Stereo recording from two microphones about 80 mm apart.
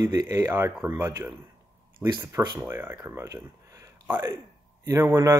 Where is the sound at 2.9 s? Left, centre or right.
Right.